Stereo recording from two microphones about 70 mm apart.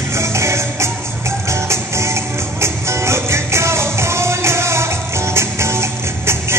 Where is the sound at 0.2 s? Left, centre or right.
Right.